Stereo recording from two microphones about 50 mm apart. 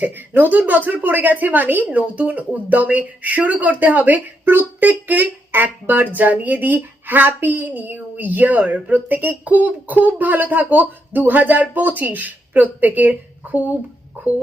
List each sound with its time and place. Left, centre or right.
0.0 s a woman's voice: right